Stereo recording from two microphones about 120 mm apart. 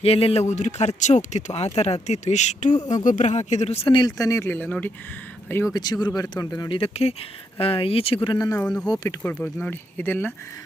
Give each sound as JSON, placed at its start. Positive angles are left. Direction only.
{"t": 0.0, "sound": "speech", "side_deg": 55}
{"t": 3.8, "sound": "speech", "side_deg": 40}
{"t": 4.2, "sound": "a man's voice", "side_deg": 25}
{"t": 5.7, "sound": "speech", "side_deg": 35}
{"t": 6.7, "sound": "speech", "side_deg": 50}
{"t": 8.5, "sound": "speech", "side_deg": 10}